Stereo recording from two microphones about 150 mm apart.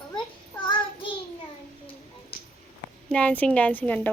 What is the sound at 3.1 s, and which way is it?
A woman's voice, 10° left (ahead or behind).